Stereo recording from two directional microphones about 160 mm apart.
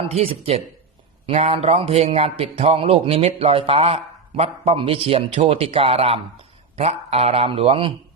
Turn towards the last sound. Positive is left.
turn(degrees=-35)  # may be behind; listen again after turning